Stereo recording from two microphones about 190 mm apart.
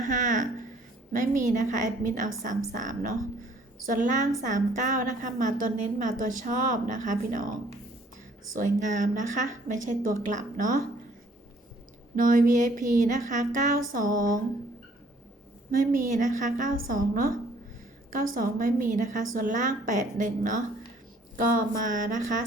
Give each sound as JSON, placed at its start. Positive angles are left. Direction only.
{"t": 0.0, "sound": "a sound", "side_deg": -45}
{"t": 1.1, "sound": "a woman's voice", "side_deg": -45}
{"t": 8.5, "sound": "a woman's voice", "side_deg": -40}
{"t": 12.1, "sound": "a woman's voice", "side_deg": -45}
{"t": 15.7, "sound": "a woman's voice", "side_deg": -45}